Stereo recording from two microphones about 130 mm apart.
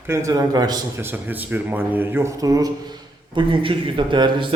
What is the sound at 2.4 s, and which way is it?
Speech, 30° right (ahead or behind).